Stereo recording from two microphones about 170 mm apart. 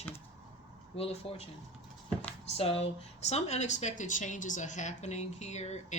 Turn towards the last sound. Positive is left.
turn(degrees=40)  # may be behind; listen again after turning